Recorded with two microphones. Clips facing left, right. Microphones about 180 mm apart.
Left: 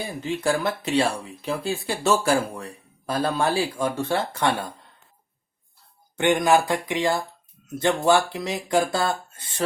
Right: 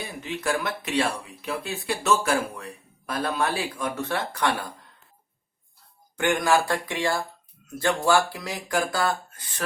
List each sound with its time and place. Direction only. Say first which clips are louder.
0.2 s speech: left 4 dB; 30° left (ahead or behind)
6.1 s speech: left 3 dB; 20° left (ahead or behind)